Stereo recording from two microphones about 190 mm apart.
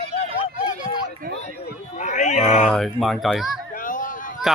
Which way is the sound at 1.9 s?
40° left (ahead or behind).